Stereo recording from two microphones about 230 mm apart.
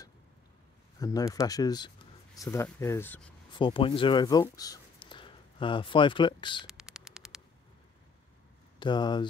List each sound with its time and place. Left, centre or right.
0.9 s speech: centre
3.5 s speech: left
6.7 s mouse: centre
8.7 s speech: centre